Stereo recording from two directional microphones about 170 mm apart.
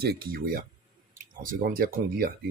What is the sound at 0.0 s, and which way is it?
Speech, 65° right (ahead or behind).